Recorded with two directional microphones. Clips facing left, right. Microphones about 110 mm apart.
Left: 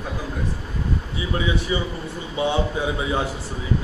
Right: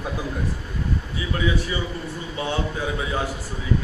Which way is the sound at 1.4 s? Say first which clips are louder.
Even; 20° left (ahead or behind).